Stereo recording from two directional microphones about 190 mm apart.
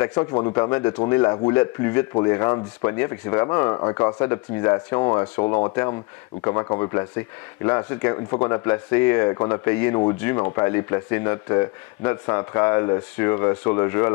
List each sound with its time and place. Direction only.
0.0 s speech: 20° left (ahead or behind)